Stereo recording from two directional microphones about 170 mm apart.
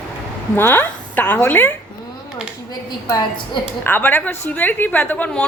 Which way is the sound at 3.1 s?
25° left (ahead or behind).